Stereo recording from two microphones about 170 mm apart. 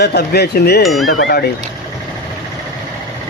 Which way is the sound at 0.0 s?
70° left (ahead or behind).